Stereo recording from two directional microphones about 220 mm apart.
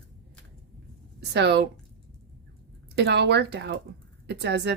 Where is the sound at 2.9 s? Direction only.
50° right (ahead or behind).